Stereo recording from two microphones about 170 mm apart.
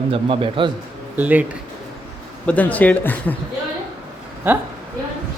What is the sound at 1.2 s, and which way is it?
Speech, 10° right (ahead or behind).